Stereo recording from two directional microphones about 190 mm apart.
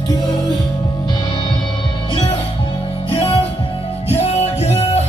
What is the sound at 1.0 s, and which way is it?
Music, 25° left (ahead or behind).